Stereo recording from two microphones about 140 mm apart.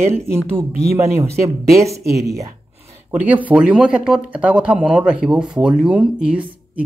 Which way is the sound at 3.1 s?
10° right (ahead or behind).